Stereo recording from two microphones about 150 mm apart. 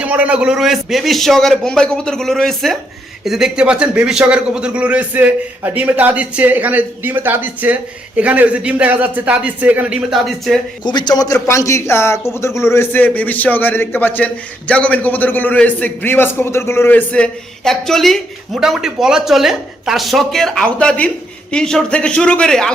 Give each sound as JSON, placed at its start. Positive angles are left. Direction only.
{"t": 0.0, "sound": "a man's voice", "side_deg": -10}
{"t": 10.8, "sound": "a man's voice", "side_deg": 30}